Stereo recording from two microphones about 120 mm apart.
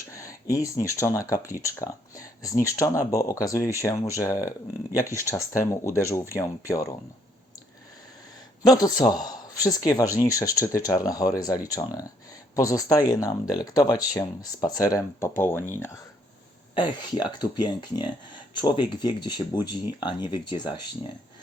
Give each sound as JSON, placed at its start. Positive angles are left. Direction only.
{"t": 0.1, "sound": "speech", "side_deg": 25}
{"t": 8.6, "sound": "speech", "side_deg": 30}
{"t": 16.7, "sound": "speech", "side_deg": 40}